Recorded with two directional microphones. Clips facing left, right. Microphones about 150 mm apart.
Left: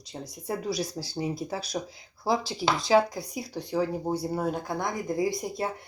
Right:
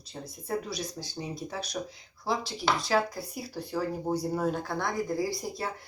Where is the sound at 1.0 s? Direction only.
40° left (ahead or behind).